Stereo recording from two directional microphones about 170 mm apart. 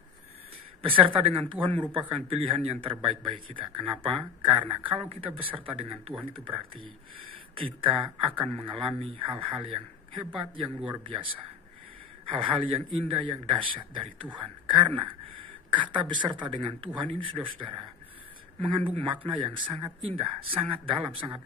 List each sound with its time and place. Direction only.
0.8 s speech: 30° right (ahead or behind)